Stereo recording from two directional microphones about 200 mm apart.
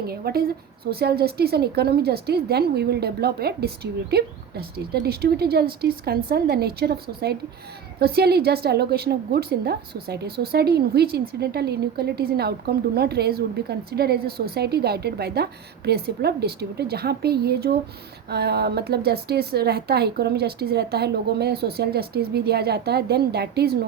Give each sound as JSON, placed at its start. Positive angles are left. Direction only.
{"t": 0.1, "sound": "a woman's voice", "side_deg": -50}